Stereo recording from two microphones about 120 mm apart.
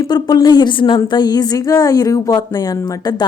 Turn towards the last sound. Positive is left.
turn(degrees=35)  # may be behind; listen again after turning